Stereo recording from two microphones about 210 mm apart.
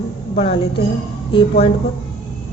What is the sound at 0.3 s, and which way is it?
Speech, 25° left (ahead or behind).